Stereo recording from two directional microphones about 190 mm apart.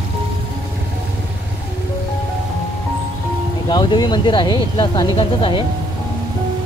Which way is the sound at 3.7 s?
25° left (ahead or behind).